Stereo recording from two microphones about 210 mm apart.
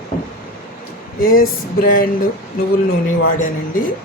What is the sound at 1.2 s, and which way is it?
Speech, 40° left (ahead or behind).